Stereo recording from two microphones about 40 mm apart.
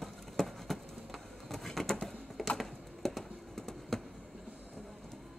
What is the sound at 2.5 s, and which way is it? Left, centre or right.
Computer keyboard, centre.